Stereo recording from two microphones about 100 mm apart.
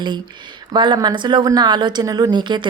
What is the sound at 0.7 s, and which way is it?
A woman's voice, 50° right (ahead or behind).